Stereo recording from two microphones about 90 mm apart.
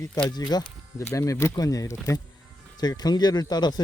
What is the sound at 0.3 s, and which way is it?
Speech, 50° left (ahead or behind).